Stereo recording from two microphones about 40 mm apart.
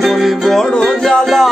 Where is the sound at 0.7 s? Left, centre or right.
Centre.